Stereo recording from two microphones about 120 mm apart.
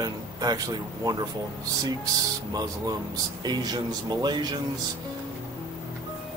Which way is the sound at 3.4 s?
35° right (ahead or behind).